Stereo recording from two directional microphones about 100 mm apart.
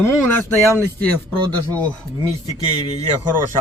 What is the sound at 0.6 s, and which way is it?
Speech, 30° left (ahead or behind).